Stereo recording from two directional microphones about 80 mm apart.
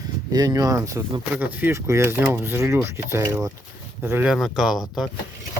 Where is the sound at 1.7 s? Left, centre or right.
Right.